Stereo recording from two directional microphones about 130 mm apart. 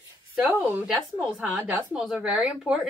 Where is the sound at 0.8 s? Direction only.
Centre (ahead or behind).